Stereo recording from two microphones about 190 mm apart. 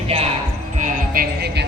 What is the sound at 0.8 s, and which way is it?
Music, 45° right (ahead or behind).